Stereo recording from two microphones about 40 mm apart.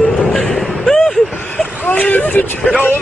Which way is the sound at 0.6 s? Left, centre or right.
Centre.